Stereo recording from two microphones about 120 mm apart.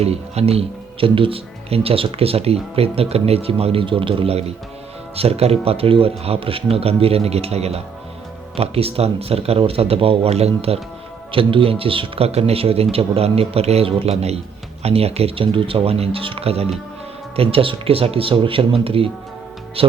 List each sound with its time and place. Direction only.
0.0 s speech: 55° right (ahead or behind)
11.3 s speech: 50° right (ahead or behind)